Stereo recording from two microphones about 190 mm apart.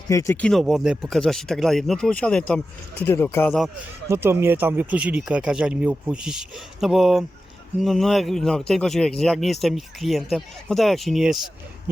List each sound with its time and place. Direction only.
0.1 s speech: 15° left (ahead or behind)
0.4 s speech: centre (ahead or behind)
4.1 s speech: 15° right (ahead or behind)